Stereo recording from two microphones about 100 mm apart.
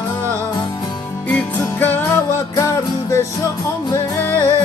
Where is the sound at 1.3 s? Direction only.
20° left (ahead or behind).